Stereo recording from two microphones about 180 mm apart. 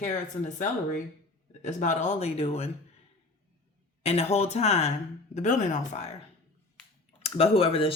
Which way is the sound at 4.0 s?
35° left (ahead or behind).